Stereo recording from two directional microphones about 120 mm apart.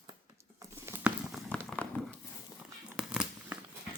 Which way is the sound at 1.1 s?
10° right (ahead or behind).